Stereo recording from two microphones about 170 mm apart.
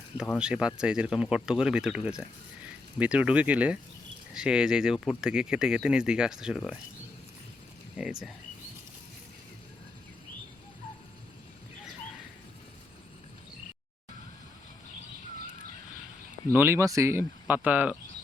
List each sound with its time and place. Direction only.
0.3 s speech: 5° right (ahead or behind)
16.5 s speech: 10° right (ahead or behind)